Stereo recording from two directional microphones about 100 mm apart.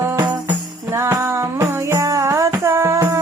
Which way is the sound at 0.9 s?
25° right (ahead or behind).